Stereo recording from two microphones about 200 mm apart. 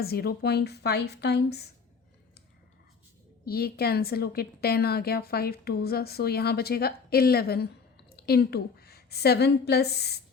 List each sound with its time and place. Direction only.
0.0 s a woman's voice: 50° left (ahead or behind)
3.4 s a woman's voice: 50° left (ahead or behind)